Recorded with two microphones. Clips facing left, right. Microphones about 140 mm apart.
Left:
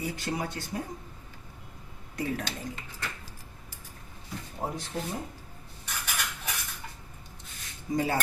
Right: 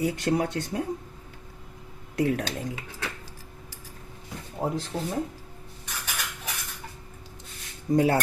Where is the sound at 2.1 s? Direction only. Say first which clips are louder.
Right 7 dB; 70° right (ahead or behind).